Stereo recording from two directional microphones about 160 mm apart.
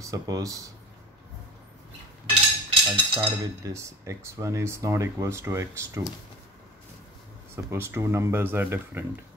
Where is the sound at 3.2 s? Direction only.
20° right (ahead or behind).